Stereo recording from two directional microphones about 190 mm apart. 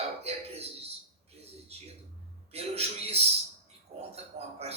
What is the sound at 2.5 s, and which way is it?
Speech, 35° right (ahead or behind).